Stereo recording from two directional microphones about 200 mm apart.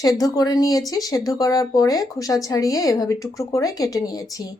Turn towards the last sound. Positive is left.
turn(degrees=15)  # may be behind; listen again after turning